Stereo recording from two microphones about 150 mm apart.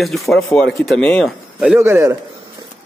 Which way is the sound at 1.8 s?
20° right (ahead or behind).